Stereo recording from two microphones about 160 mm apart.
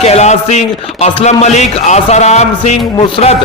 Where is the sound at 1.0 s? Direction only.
45° left (ahead or behind).